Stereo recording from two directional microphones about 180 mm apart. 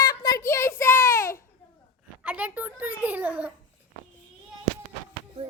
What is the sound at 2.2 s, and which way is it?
A child's voice, 5° right (ahead or behind).